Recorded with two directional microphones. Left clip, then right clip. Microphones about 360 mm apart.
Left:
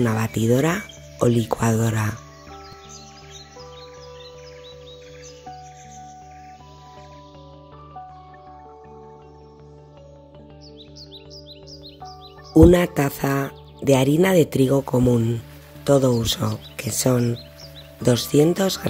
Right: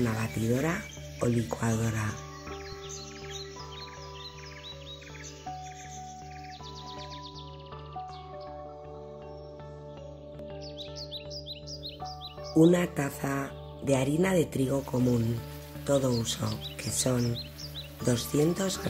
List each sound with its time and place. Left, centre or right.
0.0 s speech: left
12.5 s speech: left